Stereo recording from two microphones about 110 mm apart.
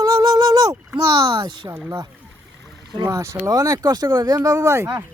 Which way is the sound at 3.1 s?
25° right (ahead or behind).